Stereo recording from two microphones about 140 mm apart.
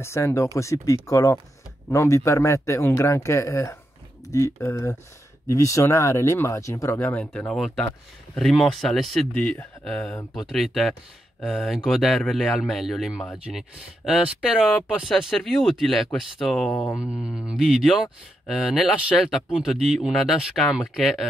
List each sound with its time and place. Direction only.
0.0 s speech: 20° left (ahead or behind); by 21.3 s centre (ahead or behind)